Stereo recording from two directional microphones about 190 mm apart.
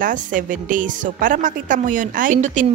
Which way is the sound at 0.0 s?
45° right (ahead or behind).